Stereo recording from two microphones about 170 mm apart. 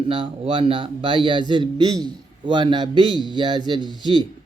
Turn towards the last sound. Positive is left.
turn(degrees=-25)  # may be behind; listen again after turning